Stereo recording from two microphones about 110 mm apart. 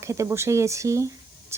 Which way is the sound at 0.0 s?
25° right (ahead or behind).